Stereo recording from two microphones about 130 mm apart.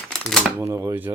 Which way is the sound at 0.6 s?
20° right (ahead or behind).